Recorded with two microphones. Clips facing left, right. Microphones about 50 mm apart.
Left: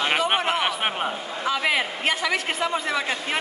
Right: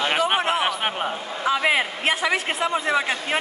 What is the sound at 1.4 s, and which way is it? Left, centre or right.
A woman's voice, centre.